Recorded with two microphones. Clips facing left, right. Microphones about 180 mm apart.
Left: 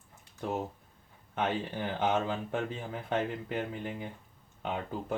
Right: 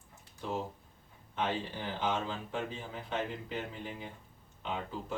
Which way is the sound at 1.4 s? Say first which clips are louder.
Left 3 dB; 55° left (ahead or behind).